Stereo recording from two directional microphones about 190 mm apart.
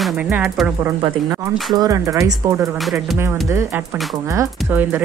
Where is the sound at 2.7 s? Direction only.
Centre (ahead or behind).